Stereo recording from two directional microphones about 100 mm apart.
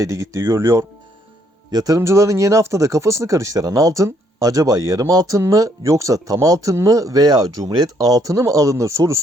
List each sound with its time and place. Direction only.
0.0 s speech: 30° right (ahead or behind)